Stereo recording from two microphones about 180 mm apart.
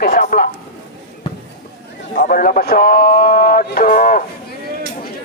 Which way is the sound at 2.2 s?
50° left (ahead or behind).